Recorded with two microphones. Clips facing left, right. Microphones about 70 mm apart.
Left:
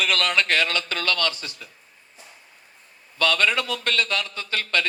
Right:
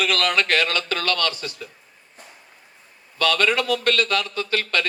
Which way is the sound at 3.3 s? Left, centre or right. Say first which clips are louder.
Right 2 dB; right.